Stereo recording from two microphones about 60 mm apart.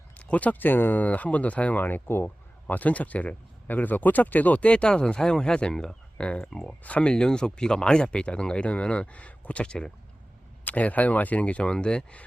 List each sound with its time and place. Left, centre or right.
0.2 s speech: left
10.6 s speech: left